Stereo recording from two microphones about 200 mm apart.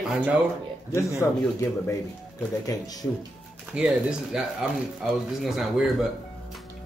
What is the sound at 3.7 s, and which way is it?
Speech, 5° right (ahead or behind).